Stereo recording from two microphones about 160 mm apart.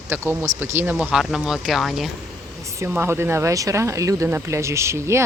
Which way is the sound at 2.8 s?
15° right (ahead or behind).